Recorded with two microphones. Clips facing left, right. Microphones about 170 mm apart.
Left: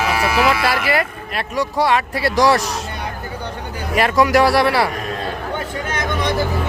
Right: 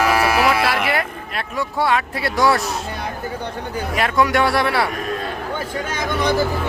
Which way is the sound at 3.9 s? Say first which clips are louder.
Left 4 dB; centre (ahead or behind).